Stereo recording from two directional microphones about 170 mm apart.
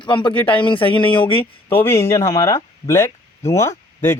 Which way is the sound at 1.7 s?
15° left (ahead or behind).